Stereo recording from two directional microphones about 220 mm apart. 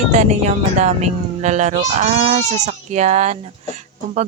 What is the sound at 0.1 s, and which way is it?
Speech, 30° right (ahead or behind).